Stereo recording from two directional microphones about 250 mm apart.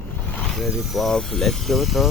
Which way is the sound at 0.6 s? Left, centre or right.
Centre.